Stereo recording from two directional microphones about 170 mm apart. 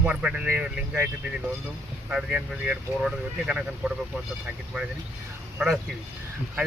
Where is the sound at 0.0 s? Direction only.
5° right (ahead or behind).